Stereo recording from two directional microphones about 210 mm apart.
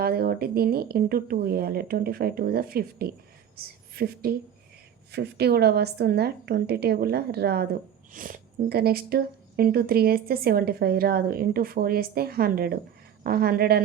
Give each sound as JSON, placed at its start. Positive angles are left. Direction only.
{"t": 0.0, "sound": "a woman's voice", "side_deg": -45}